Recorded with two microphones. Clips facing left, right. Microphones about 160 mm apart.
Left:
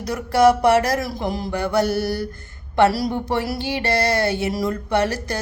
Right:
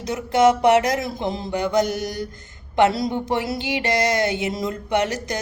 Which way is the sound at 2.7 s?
20° right (ahead or behind).